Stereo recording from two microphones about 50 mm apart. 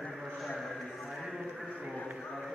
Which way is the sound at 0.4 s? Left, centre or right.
Centre.